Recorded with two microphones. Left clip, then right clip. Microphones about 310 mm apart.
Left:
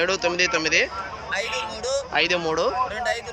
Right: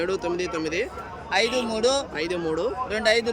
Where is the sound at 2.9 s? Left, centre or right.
Right.